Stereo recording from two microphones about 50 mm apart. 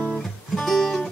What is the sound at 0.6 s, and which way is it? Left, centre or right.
Music, centre.